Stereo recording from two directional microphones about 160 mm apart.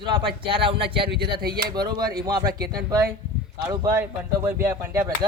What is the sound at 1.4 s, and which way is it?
Speech, 70° right (ahead or behind).